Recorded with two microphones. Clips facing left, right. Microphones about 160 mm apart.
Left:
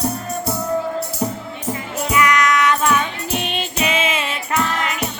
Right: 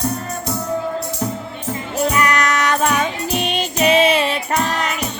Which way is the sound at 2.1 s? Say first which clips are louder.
Left 5 dB; 35° right (ahead or behind).